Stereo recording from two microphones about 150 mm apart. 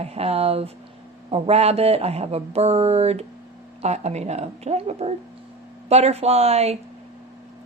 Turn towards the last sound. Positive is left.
turn(degrees=-45)  # may be behind; listen again after turning